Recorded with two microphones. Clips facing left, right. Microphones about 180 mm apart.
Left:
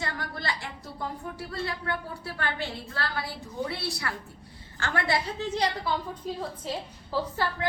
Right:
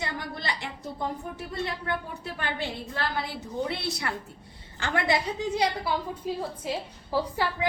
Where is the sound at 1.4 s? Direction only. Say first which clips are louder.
Right 1 dB; 20° right (ahead or behind).